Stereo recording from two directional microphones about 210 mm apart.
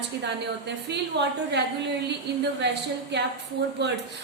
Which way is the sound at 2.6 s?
55° right (ahead or behind).